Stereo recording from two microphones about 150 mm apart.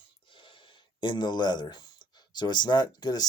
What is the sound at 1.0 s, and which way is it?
Speech, 30° left (ahead or behind).